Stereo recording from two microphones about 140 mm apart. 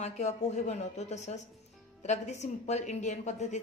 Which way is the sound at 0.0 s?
50° left (ahead or behind).